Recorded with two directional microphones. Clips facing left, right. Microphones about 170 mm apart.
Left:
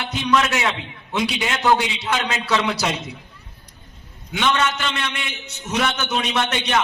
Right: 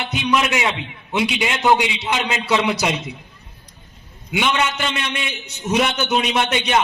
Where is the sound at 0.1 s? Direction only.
15° right (ahead or behind).